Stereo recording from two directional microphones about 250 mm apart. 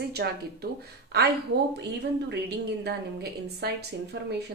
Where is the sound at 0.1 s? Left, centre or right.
Right.